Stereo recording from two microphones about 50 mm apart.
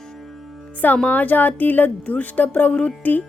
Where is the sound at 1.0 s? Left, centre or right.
Left.